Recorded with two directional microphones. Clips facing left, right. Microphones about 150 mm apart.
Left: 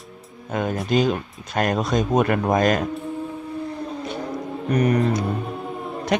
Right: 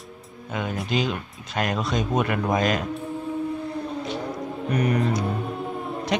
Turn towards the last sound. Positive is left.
turn(degrees=50)  # may be behind; listen again after turning